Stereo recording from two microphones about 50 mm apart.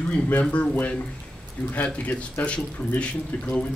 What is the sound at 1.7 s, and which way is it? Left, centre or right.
Speech, left.